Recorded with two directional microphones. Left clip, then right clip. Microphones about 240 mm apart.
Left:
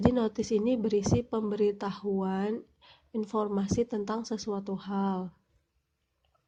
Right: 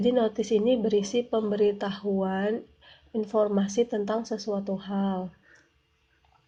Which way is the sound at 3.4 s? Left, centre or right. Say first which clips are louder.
Right 6 dB; left.